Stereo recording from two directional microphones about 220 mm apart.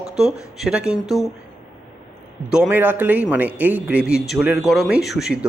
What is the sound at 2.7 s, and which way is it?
Speech, 5° right (ahead or behind).